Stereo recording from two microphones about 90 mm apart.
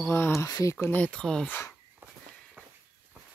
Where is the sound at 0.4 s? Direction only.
35° left (ahead or behind).